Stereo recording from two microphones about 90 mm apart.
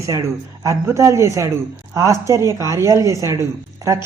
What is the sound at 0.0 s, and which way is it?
A woman's voice, 35° right (ahead or behind).